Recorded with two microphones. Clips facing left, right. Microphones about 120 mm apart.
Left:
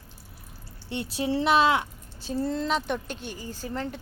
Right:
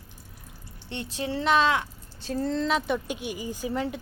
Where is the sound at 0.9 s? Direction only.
15° left (ahead or behind).